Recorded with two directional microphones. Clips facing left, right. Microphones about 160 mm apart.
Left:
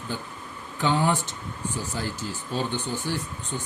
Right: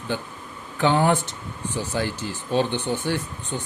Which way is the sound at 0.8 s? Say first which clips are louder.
Right 4 dB; 60° right (ahead or behind).